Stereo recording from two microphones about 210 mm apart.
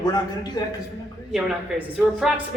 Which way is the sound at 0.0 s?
20° left (ahead or behind).